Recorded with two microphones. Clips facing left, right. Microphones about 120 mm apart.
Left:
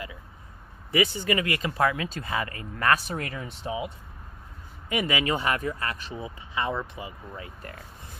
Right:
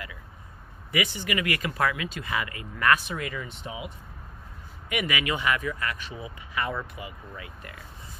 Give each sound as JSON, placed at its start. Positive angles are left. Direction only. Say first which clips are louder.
{"t": 0.9, "sound": "speech", "louder": "left 4 dB", "side_deg": 35}